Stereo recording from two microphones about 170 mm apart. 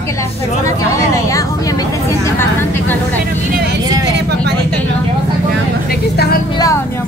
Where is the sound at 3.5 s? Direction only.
70° right (ahead or behind).